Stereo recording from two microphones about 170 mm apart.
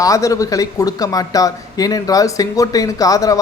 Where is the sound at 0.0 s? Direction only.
20° left (ahead or behind).